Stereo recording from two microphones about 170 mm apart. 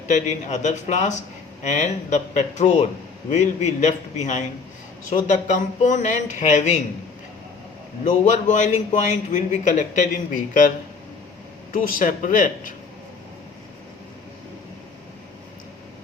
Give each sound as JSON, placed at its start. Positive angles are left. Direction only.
{"t": 0.1, "sound": "a man's voice", "side_deg": 45}
{"t": 8.0, "sound": "a man's voice", "side_deg": 45}
{"t": 11.7, "sound": "a man's voice", "side_deg": 55}